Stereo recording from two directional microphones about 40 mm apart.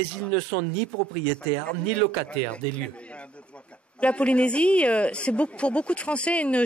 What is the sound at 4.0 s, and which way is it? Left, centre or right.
Speech, left.